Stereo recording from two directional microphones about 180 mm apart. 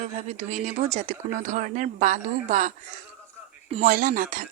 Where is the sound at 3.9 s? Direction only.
45° right (ahead or behind).